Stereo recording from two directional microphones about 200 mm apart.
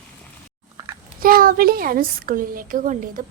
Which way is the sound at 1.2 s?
45° right (ahead or behind).